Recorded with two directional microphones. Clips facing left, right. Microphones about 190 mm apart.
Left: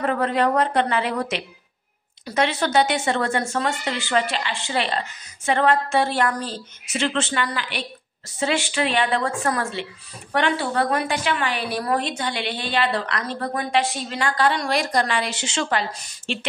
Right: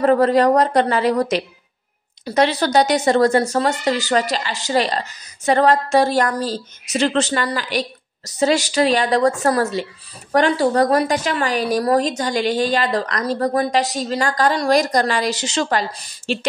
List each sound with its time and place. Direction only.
0.0 s a woman's voice: 35° right (ahead or behind)